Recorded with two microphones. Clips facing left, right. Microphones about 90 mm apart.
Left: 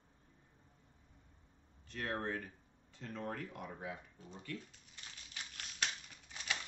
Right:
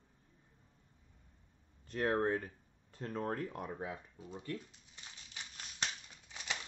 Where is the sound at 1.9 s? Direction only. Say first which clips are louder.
Right 7 dB; 35° right (ahead or behind).